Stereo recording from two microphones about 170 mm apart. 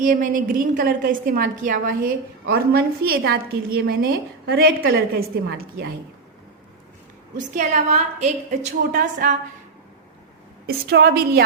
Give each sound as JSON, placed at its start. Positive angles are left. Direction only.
{"t": 0.0, "sound": "a woman's voice", "side_deg": -50}
{"t": 7.3, "sound": "a woman's voice", "side_deg": -45}
{"t": 10.7, "sound": "a woman's voice", "side_deg": -70}